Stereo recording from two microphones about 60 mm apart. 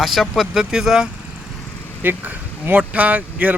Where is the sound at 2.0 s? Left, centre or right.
Right.